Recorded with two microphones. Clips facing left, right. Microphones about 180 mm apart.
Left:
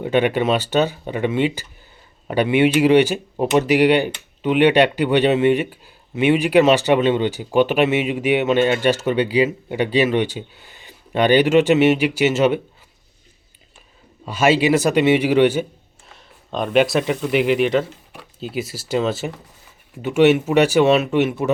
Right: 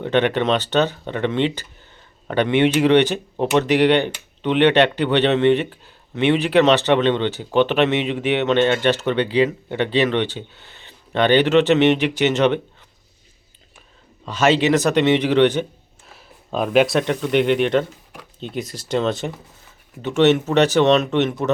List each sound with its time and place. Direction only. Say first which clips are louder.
0.0 s speech: left 1 dB; 10° left (ahead or behind)
14.3 s speech: left 1 dB; 10° left (ahead or behind)
16.0 s speech: right 2 dB; 5° right (ahead or behind)